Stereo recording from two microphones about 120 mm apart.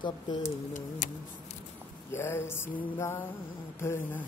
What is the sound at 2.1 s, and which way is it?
Music, 20° left (ahead or behind).